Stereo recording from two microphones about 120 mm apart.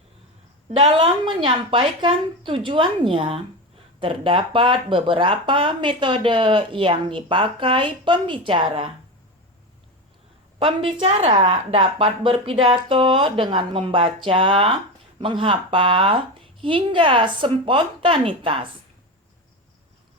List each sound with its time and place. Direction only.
0.7 s speech: 50° right (ahead or behind)
10.6 s speech: 50° right (ahead or behind)